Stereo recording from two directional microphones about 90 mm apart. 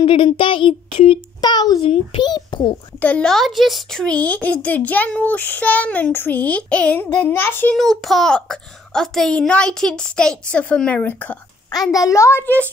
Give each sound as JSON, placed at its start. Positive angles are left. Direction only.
{"t": 0.0, "sound": "speech", "side_deg": 70}
{"t": 1.4, "sound": "a child's voice", "side_deg": 50}
{"t": 1.8, "sound": "a child's voice", "side_deg": 90}
{"t": 2.2, "sound": "a child's voice", "side_deg": 55}
{"t": 3.0, "sound": "speech", "side_deg": 15}
{"t": 3.3, "sound": "speech", "side_deg": 0}
{"t": 4.0, "sound": "a child's voice", "side_deg": 15}
{"t": 7.7, "sound": "a child's voice", "side_deg": 0}
{"t": 11.7, "sound": "a child's voice", "side_deg": 45}